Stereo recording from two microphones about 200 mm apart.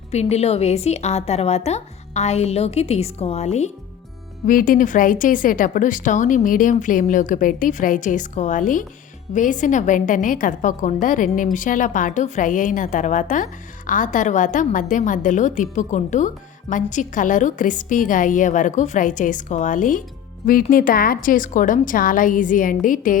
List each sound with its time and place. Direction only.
0.1 s a woman's voice: 35° left (ahead or behind)
4.4 s a woman's voice: 45° left (ahead or behind)